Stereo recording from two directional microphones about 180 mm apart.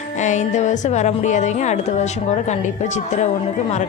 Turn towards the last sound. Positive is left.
turn(degrees=40)  # may be behind; listen again after turning